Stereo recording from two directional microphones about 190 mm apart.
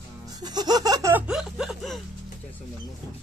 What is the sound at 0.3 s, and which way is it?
Laughter, 20° right (ahead or behind).